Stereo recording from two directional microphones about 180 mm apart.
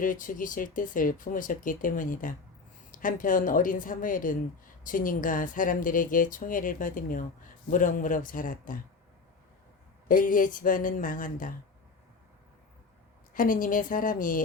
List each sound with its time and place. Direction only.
0.0 s a woman's voice: 45° left (ahead or behind)
10.1 s a woman's voice: 50° left (ahead or behind)
13.3 s a woman's voice: 50° left (ahead or behind)